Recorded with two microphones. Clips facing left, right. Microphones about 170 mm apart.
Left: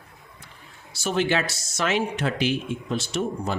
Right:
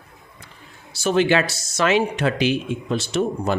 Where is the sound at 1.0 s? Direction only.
85° right.